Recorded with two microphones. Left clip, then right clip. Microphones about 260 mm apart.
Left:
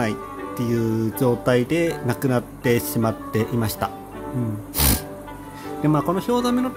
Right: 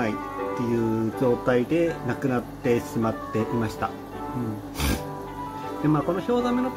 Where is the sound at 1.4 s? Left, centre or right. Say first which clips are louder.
Left 2 dB; left.